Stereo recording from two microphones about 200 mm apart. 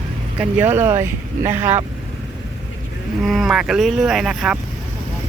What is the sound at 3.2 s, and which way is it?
Speech, centre (ahead or behind).